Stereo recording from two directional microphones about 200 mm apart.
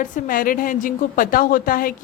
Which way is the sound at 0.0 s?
45° left (ahead or behind).